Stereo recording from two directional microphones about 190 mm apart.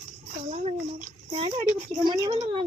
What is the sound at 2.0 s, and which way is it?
Speech, 25° right (ahead or behind).